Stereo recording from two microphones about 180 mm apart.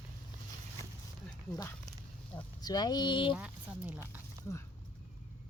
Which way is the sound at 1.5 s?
20° left (ahead or behind).